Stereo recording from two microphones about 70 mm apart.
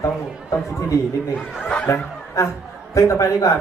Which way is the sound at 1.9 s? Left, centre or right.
Left.